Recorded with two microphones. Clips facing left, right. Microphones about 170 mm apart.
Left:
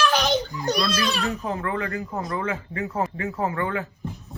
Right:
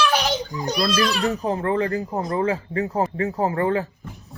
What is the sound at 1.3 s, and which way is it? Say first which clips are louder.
Speech: right 5 dB; 35° right (ahead or behind).